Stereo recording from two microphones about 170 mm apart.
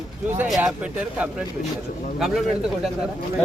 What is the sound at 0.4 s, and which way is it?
Speech, centre (ahead or behind).